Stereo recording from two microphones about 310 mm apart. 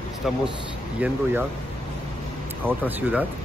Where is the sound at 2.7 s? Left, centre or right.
Centre.